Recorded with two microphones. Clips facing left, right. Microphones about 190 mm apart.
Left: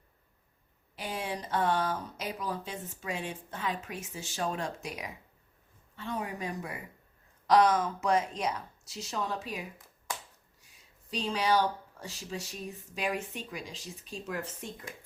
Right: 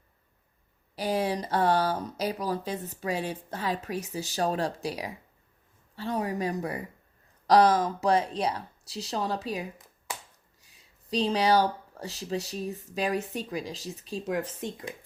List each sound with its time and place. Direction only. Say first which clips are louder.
0.9 s speech: right 8 dB; 35° right (ahead or behind)
11.1 s speech: right 5 dB; 35° right (ahead or behind)